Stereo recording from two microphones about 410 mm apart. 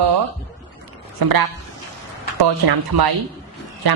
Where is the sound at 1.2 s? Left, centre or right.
Right.